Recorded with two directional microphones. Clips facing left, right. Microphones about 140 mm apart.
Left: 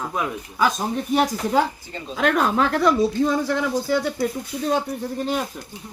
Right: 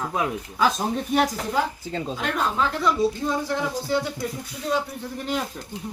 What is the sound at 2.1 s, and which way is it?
Speech, 65° left (ahead or behind).